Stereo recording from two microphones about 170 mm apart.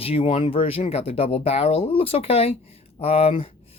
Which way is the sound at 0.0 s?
35° left (ahead or behind).